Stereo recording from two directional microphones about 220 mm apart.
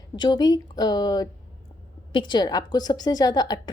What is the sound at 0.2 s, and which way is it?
A woman's voice, 20° left (ahead or behind).